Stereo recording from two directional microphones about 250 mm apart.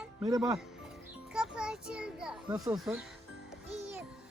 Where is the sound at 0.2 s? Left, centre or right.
Centre.